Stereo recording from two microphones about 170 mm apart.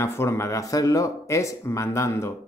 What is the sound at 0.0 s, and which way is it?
Speech, 15° left (ahead or behind).